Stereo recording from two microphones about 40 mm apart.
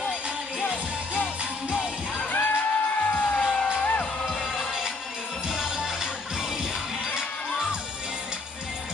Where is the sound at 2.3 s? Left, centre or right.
Left.